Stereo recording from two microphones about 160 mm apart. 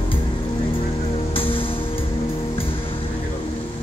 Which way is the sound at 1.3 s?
35° left (ahead or behind).